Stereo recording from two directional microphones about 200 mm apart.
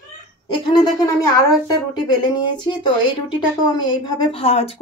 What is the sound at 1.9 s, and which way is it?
Speech, 20° left (ahead or behind).